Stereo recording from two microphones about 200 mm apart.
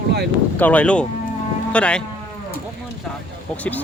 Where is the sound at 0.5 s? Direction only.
10° left (ahead or behind).